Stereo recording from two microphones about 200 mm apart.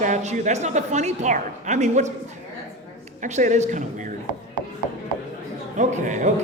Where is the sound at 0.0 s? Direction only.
35° right (ahead or behind).